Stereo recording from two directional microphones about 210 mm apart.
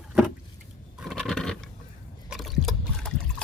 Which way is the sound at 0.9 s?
Centre (ahead or behind).